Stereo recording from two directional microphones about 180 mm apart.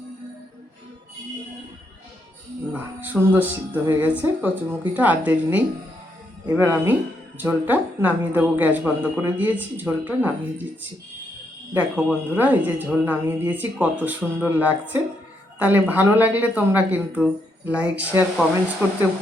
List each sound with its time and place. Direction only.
2.7 s speech: 10° right (ahead or behind)
11.7 s speech: 5° right (ahead or behind)